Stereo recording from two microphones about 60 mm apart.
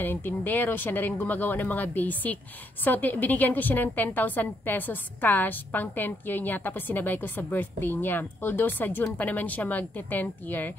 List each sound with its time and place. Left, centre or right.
0.0 s a woman's voice: left